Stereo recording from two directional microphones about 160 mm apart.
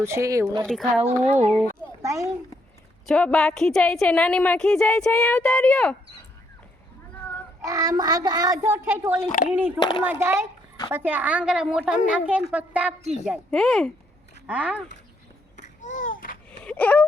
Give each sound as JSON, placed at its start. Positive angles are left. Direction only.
{"t": 0.0, "sound": "a child's voice", "side_deg": -20}
{"t": 0.6, "sound": "a woman's voice", "side_deg": -5}
{"t": 1.0, "sound": "speech", "side_deg": -45}
{"t": 1.5, "sound": "a child's voice", "side_deg": 10}
{"t": 2.0, "sound": "a child's voice", "side_deg": -20}
{"t": 3.1, "sound": "a woman's voice", "side_deg": 5}
{"t": 7.6, "sound": "a child's voice", "side_deg": -20}
{"t": 9.2, "sound": "speech", "side_deg": 55}
{"t": 9.6, "sound": "a woman's voice", "side_deg": -10}
{"t": 15.5, "sound": "babbling", "side_deg": 50}
{"t": 16.5, "sound": "a sound", "side_deg": 10}